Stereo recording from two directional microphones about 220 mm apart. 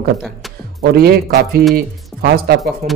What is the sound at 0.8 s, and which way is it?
Speech, 45° right (ahead or behind).